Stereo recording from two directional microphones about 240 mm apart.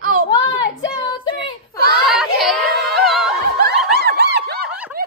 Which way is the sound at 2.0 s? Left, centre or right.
Centre.